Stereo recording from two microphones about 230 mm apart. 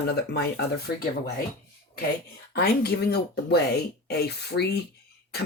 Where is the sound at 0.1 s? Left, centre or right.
Left.